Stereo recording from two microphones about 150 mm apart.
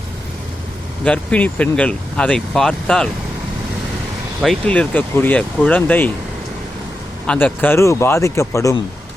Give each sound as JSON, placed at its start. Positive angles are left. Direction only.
{"t": 1.0, "sound": "speech", "side_deg": 10}
{"t": 4.4, "sound": "speech", "side_deg": 5}
{"t": 7.3, "sound": "speech", "side_deg": 10}